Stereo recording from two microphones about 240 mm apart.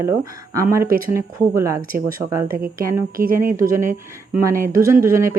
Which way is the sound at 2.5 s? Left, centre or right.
Right.